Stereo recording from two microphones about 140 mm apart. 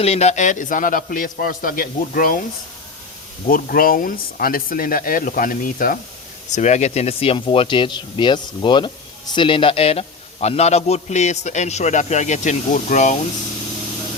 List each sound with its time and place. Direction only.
0.0 s a man's voice: 50° left (ahead or behind); by 2.4 s 90° left
3.5 s speech: 90° left
6.5 s speech: 55° left (ahead or behind)